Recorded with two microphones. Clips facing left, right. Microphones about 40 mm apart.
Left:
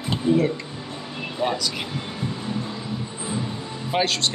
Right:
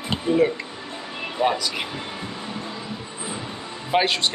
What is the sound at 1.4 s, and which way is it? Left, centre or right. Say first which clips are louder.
Speech: right 3 dB; centre.